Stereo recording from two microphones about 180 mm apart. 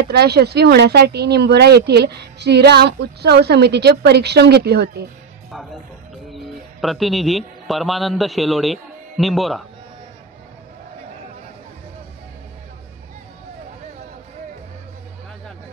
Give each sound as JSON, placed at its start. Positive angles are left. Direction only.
{"t": 0.1, "sound": "speech", "side_deg": -65}
{"t": 5.5, "sound": "speech", "side_deg": 0}